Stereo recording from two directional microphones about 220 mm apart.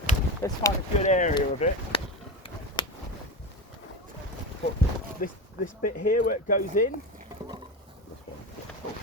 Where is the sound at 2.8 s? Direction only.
20° left (ahead or behind).